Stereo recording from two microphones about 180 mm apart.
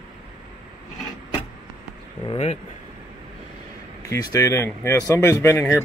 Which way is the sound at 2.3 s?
35° left (ahead or behind).